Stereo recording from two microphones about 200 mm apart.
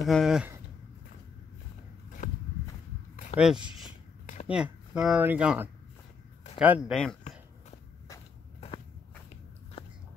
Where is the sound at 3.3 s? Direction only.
30° left (ahead or behind).